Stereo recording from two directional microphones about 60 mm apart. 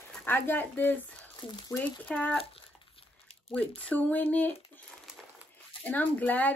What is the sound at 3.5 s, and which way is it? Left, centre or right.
A woman's voice, left.